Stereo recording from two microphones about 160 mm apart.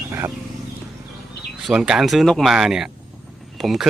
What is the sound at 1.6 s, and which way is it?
Speech, 5° right (ahead or behind).